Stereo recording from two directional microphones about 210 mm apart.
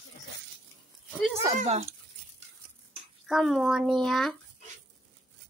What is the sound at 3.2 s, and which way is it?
Speech, centre (ahead or behind).